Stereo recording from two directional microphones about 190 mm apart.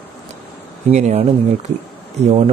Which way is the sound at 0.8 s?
35° right (ahead or behind).